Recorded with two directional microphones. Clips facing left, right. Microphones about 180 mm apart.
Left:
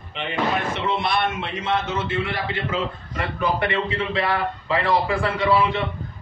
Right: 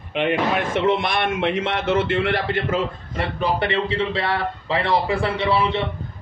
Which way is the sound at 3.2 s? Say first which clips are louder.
Right 1 dB; 30° right (ahead or behind).